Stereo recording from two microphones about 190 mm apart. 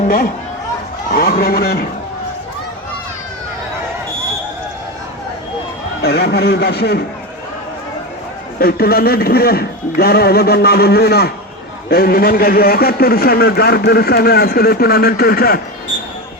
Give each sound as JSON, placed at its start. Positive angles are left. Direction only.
{"t": 1.1, "sound": "a man's voice", "side_deg": 50}
{"t": 6.0, "sound": "a man's voice", "side_deg": 55}
{"t": 8.5, "sound": "a man's voice", "side_deg": 50}